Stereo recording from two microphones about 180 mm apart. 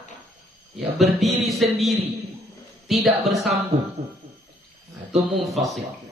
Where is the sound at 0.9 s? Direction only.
Centre (ahead or behind).